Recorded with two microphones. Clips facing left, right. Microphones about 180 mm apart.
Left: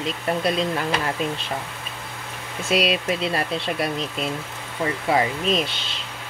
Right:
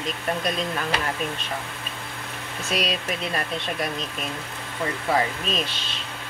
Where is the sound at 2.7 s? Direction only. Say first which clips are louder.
Left 6 dB; 75° left (ahead or behind).